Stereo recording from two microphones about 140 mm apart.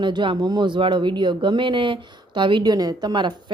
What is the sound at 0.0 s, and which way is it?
Speech, 35° right (ahead or behind).